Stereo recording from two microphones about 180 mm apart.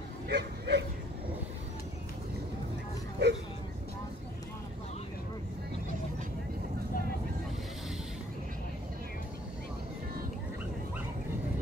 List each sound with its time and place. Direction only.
0.3 s dog: 70° right (ahead or behind)
3.2 s speech: 70° right (ahead or behind)